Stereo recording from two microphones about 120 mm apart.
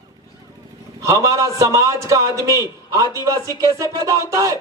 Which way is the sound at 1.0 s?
25° right (ahead or behind).